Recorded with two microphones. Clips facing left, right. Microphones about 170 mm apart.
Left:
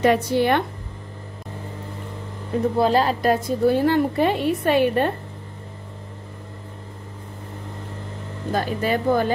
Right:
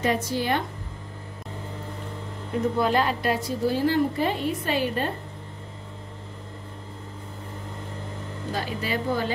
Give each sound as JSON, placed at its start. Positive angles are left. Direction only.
{"t": 0.0, "sound": "a woman's voice", "side_deg": 65}
{"t": 2.8, "sound": "a woman's voice", "side_deg": 35}
{"t": 8.5, "sound": "speech", "side_deg": 50}